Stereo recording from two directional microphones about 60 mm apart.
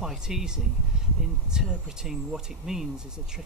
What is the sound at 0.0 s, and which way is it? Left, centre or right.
Speech, centre.